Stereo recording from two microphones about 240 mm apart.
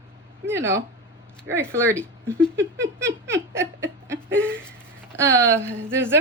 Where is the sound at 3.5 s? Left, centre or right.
Centre.